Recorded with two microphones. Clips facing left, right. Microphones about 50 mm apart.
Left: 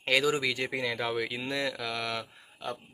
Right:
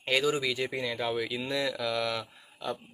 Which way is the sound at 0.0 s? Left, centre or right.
Left.